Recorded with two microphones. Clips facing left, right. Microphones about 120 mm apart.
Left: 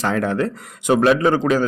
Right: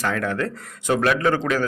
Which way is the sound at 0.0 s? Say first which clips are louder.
Left 4 dB; 25° left (ahead or behind).